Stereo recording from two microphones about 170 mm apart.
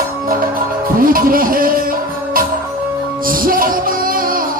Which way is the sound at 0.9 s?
55° right (ahead or behind).